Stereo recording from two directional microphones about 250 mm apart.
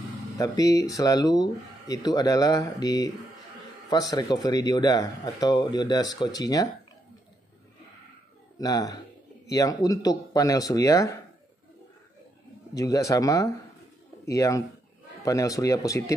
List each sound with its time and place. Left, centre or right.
0.4 s speech: centre
8.5 s speech: centre
12.7 s speech: centre